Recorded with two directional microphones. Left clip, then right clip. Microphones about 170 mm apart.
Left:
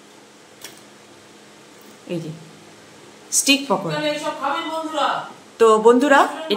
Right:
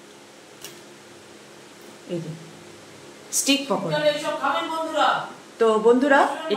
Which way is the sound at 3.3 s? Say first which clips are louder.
Left 4 dB; 25° left (ahead or behind).